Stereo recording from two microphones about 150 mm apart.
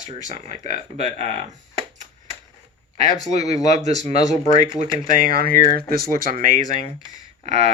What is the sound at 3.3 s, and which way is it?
Speech, 45° right (ahead or behind).